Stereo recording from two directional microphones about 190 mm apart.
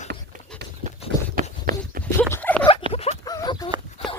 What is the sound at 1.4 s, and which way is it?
Horse, 45° right (ahead or behind).